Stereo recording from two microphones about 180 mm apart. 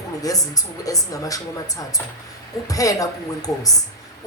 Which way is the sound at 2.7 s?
20° left (ahead or behind).